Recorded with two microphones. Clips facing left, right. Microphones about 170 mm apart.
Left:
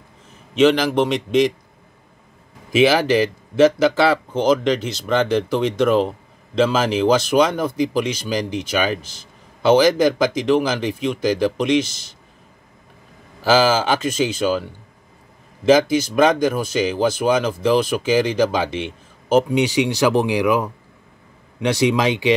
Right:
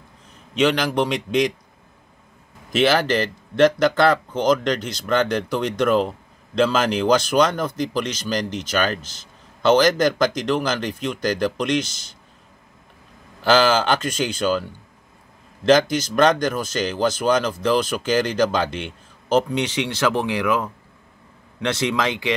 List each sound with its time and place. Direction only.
0.6 s speech: 5° left (ahead or behind)
2.7 s speech: 10° left (ahead or behind)
13.4 s speech: 5° left (ahead or behind)
15.6 s speech: 5° left (ahead or behind)